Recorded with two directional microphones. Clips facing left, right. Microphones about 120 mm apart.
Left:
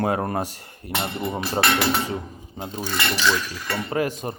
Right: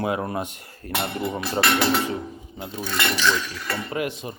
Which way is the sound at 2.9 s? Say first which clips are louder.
Even; 5° left (ahead or behind).